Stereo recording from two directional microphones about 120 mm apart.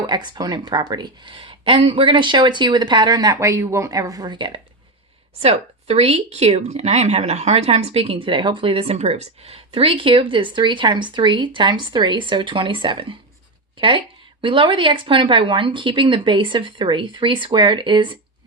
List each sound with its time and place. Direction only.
0.1 s speech: 35° right (ahead or behind)
5.4 s speech: 60° right (ahead or behind); by 18.2 s 40° right (ahead or behind)